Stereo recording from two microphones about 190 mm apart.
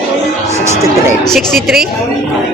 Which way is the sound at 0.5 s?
15° right (ahead or behind).